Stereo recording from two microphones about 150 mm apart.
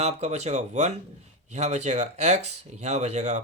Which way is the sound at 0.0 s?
45° right (ahead or behind).